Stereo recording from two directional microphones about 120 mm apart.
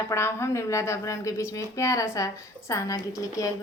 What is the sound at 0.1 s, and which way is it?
Female singing, 20° left (ahead or behind).